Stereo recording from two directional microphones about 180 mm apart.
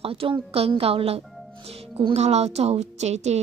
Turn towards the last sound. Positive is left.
turn(degrees=-40)  # may be behind; listen again after turning